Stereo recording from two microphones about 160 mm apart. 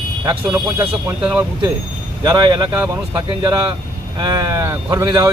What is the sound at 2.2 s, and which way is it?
A man's voice, 25° right (ahead or behind).